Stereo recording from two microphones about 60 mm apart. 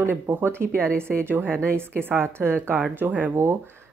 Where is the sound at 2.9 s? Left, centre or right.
Right.